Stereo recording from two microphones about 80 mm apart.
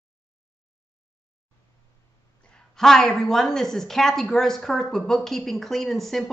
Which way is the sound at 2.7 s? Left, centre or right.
Centre.